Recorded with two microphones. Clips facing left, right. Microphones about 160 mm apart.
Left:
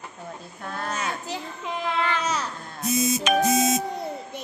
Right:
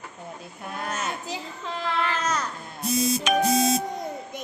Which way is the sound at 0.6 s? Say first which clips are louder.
Left 1 dB; 10° right (ahead or behind).